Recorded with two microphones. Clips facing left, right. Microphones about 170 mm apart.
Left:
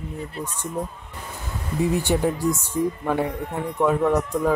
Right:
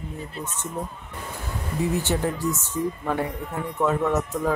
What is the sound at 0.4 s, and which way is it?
Speech, 10° left (ahead or behind).